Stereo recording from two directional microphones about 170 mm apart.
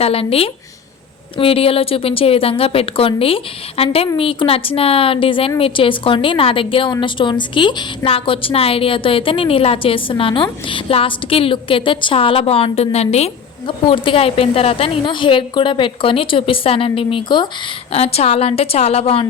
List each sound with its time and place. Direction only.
0.0 s a woman's voice: 35° left (ahead or behind)
17.9 s a woman's voice: 35° left (ahead or behind)